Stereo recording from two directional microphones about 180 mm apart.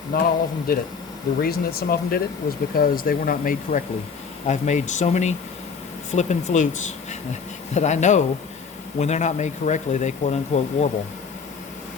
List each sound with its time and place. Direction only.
0.1 s speech: 55° left (ahead or behind)
7.7 s speech: 40° left (ahead or behind)